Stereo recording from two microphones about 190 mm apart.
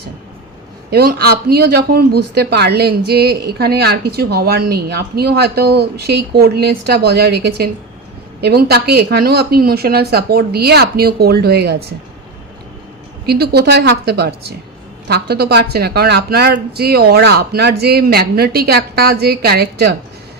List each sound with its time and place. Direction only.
0.9 s speech: 55° right (ahead or behind)
13.2 s speech: 55° right (ahead or behind)